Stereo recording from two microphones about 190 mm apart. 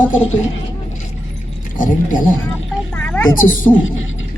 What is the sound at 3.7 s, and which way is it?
Speech, 90° left.